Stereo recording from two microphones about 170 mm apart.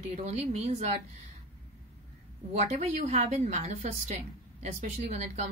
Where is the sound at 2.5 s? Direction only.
40° right (ahead or behind).